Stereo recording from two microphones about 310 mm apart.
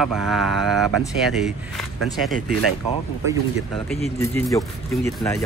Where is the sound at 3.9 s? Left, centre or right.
Centre.